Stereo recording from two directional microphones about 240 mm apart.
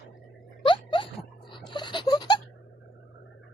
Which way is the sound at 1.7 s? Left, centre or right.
Centre.